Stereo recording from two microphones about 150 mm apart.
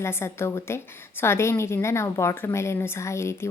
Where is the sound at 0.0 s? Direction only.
15° left (ahead or behind).